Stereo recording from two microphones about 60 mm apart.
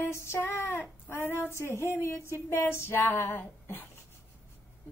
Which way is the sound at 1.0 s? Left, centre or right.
Left.